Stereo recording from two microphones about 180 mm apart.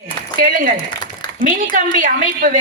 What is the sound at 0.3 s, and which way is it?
A woman's voice, 50° right (ahead or behind).